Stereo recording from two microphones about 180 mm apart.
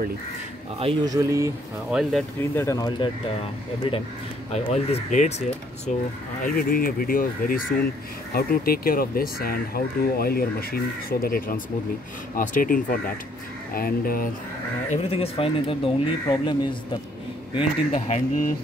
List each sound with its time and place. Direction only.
1.0 s speech: 20° right (ahead or behind)
1.9 s speech: 5° right (ahead or behind)
2.5 s speech: 15° left (ahead or behind)
3.9 s speech: 30° left (ahead or behind)
6.4 s speech: 50° left (ahead or behind)
14.9 s speech: 35° left (ahead or behind)
17.6 s speech: 35° left (ahead or behind)